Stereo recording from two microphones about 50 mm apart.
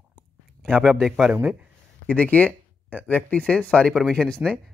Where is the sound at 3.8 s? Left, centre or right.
Centre.